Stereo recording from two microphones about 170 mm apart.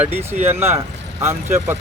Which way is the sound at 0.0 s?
15° right (ahead or behind).